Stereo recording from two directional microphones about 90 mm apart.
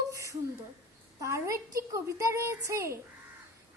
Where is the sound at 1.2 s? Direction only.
35° right (ahead or behind).